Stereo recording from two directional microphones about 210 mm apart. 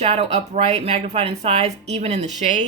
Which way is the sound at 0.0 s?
30° right (ahead or behind).